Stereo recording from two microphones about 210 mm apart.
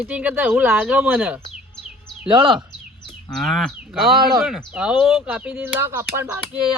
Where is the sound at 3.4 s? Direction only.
Centre (ahead or behind).